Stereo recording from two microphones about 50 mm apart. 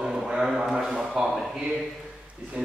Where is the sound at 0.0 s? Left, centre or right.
Centre.